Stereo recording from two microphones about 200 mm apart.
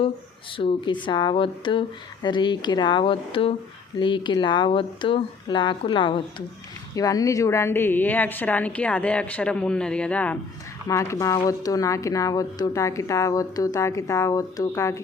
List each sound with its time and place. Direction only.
0.5 s speech: 25° left (ahead or behind)